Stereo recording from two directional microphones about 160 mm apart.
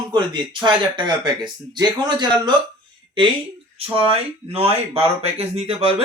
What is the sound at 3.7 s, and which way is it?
A man's voice, 35° right (ahead or behind).